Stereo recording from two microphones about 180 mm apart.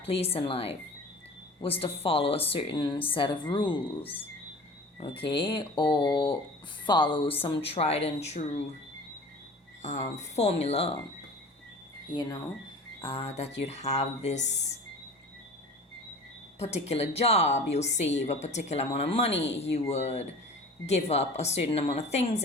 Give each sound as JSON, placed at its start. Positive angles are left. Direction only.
{"t": 0.0, "sound": "a woman's voice", "side_deg": 30}
{"t": 9.8, "sound": "speech", "side_deg": 40}
{"t": 13.0, "sound": "speech", "side_deg": 30}
{"t": 16.6, "sound": "speech", "side_deg": 35}